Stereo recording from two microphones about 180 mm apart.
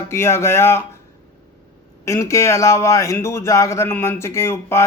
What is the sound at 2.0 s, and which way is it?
Speech, 15° left (ahead or behind).